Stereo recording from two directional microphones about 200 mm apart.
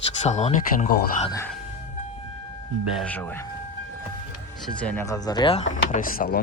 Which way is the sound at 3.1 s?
10° left (ahead or behind).